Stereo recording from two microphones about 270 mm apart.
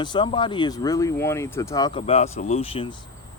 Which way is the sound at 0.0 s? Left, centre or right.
Centre.